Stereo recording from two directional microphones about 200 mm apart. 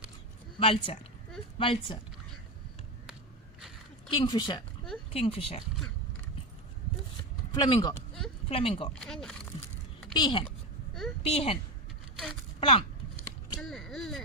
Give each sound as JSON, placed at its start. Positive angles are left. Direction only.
{"t": 0.6, "sound": "speech", "side_deg": 30}
{"t": 4.1, "sound": "speech", "side_deg": 20}
{"t": 7.5, "sound": "speech", "side_deg": 20}
{"t": 8.9, "sound": "speech", "side_deg": 5}
{"t": 10.2, "sound": "speech", "side_deg": 25}
{"t": 12.5, "sound": "a sound", "side_deg": 30}
{"t": 13.6, "sound": "a sound", "side_deg": 0}